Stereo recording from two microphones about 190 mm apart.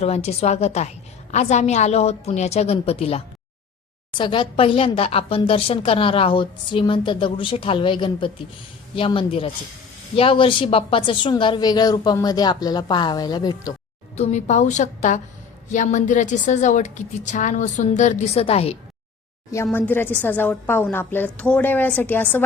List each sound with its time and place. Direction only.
0.0 s a woman's voice: 35° left (ahead or behind)
14.2 s a woman's voice: 35° left (ahead or behind)
19.7 s a woman's voice: 10° left (ahead or behind)